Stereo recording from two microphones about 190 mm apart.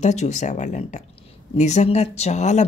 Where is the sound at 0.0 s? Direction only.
35° left (ahead or behind).